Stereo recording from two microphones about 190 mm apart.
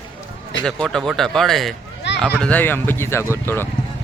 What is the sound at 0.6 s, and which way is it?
A man's voice, 5° left (ahead or behind).